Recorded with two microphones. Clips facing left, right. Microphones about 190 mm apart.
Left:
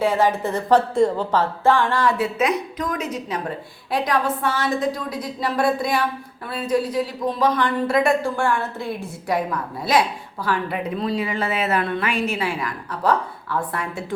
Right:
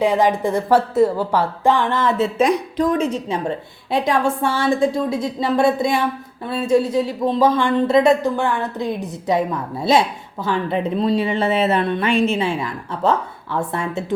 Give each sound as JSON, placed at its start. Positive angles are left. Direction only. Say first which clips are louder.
{"t": 0.0, "sound": "speech", "louder": "right 3 dB", "side_deg": -15}